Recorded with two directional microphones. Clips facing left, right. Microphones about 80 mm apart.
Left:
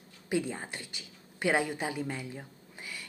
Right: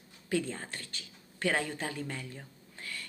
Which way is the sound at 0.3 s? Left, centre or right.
Centre.